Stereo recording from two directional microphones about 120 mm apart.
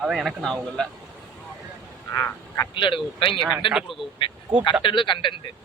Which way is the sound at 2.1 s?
25° left (ahead or behind).